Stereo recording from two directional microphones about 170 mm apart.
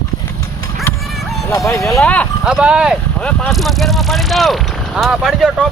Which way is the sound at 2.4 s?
5° right (ahead or behind).